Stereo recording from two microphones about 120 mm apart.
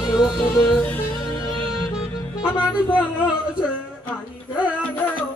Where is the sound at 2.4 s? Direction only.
10° right (ahead or behind).